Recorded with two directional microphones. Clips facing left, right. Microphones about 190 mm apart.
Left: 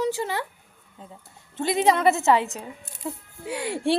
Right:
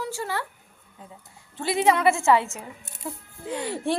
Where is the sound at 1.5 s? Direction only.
20° left (ahead or behind).